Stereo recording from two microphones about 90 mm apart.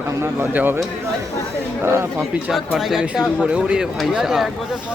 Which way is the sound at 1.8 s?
30° right (ahead or behind).